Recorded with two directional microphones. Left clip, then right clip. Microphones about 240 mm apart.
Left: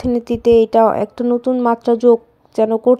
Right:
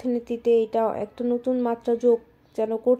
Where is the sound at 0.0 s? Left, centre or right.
Left.